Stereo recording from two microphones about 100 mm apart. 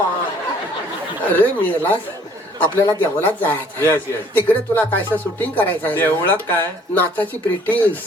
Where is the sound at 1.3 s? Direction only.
20° left (ahead or behind).